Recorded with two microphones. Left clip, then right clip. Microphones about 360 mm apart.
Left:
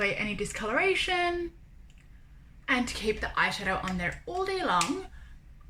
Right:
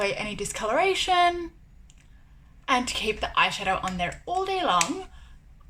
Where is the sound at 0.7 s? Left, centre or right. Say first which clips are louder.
Right 4 dB; right.